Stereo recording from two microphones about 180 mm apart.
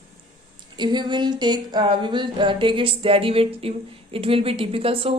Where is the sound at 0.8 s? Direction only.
25° right (ahead or behind).